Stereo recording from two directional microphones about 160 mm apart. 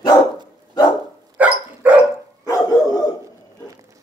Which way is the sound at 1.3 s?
10° right (ahead or behind).